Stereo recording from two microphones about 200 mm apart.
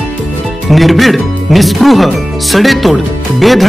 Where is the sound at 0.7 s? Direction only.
Centre (ahead or behind).